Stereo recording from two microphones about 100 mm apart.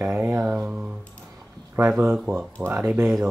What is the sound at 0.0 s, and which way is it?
Mantra, 20° right (ahead or behind).